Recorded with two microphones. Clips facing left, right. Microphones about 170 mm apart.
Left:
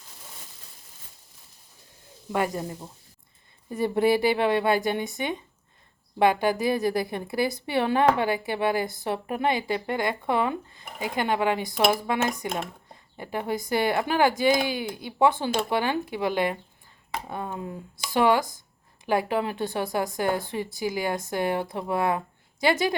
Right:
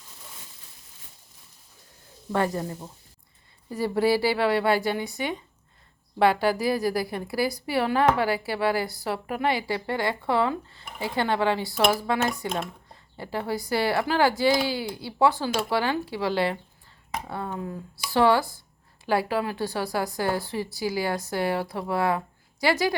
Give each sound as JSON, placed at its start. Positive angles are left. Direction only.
{"t": 2.3, "sound": "a woman's voice", "side_deg": 15}